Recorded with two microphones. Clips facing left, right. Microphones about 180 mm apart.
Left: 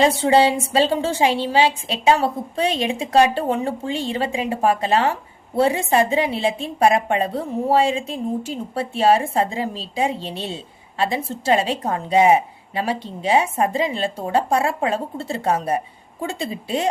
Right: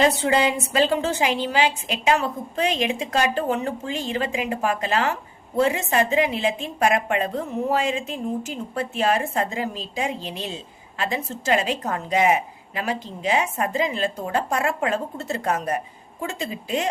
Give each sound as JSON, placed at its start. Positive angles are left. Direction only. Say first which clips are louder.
{"t": 0.0, "sound": "a woman's voice", "louder": "left 4 dB", "side_deg": 30}